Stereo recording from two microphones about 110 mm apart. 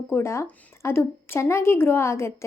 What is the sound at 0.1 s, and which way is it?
A woman's voice, 25° left (ahead or behind).